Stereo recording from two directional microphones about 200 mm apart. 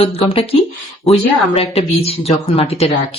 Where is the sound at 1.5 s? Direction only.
30° left (ahead or behind).